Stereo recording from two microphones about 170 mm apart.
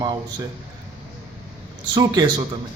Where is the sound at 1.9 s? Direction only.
25° right (ahead or behind).